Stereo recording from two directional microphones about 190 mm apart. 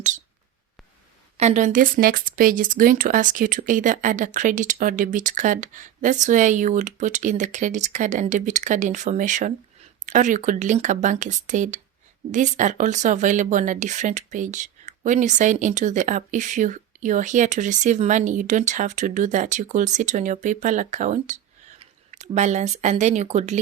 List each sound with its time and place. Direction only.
1.4 s speech: 40° right (ahead or behind)